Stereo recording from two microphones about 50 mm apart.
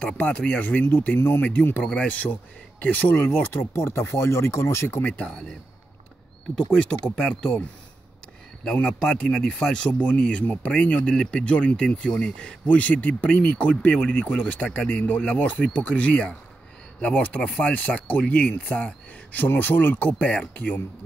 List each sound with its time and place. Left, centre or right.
0.0 s speech: centre
0.6 s speech: left
1.4 s speech: left
3.5 s speech: left
6.6 s speech: centre
8.8 s speech: centre
9.9 s speech: left
19.4 s speech: left
20.1 s speech: left